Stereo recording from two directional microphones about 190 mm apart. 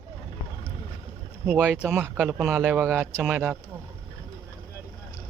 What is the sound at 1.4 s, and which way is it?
Speech, 10° right (ahead or behind).